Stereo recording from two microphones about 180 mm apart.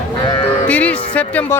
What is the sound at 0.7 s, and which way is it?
Speech, 5° left (ahead or behind).